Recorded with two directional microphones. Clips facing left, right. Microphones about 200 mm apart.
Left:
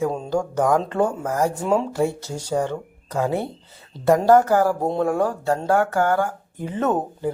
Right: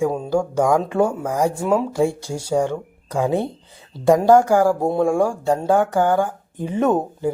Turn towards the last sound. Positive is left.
turn(degrees=-15)  # may be behind; listen again after turning